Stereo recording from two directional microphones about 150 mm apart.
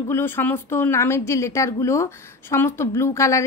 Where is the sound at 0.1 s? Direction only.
15° left (ahead or behind).